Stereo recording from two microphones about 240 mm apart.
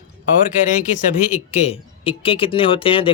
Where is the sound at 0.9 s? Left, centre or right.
Left.